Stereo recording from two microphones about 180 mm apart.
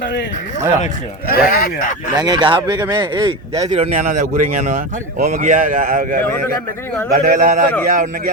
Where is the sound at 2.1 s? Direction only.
25° right (ahead or behind); by 6.2 s 50° right (ahead or behind).